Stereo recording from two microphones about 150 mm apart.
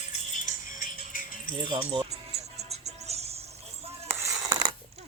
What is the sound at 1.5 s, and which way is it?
Music, 35° right (ahead or behind).